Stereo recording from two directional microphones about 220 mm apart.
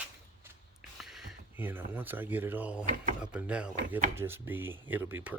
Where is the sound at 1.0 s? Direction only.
Centre (ahead or behind).